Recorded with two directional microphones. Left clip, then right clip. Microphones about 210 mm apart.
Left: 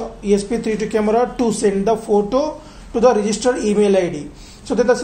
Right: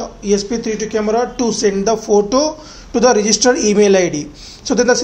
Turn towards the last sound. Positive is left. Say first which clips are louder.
# right 3 dB
turn(degrees=-30)  # may be behind; listen again after turning